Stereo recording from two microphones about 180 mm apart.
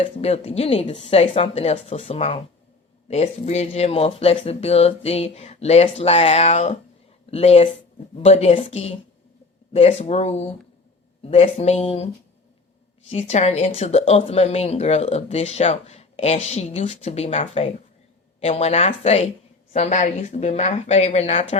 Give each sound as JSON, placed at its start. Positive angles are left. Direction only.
{"t": 0.0, "sound": "speech", "side_deg": 35}
{"t": 13.1, "sound": "speech", "side_deg": 35}